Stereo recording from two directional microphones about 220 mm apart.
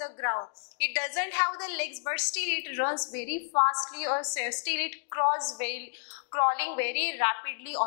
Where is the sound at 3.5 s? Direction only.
25° left (ahead or behind).